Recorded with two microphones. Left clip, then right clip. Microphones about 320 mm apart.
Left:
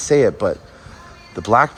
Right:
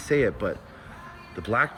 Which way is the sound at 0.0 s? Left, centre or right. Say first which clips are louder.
Left 9 dB; centre.